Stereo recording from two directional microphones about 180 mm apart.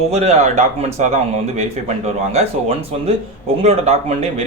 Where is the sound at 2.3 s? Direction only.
35° right (ahead or behind).